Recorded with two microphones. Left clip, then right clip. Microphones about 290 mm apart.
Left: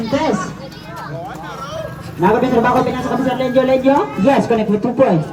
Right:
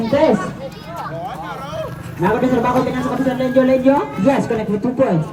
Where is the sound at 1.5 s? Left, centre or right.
Right.